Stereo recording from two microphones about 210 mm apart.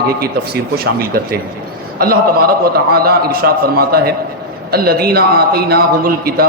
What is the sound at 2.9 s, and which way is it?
Speech, 45° right (ahead or behind).